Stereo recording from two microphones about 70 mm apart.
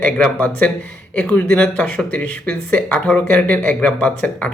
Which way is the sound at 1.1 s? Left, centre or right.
Centre.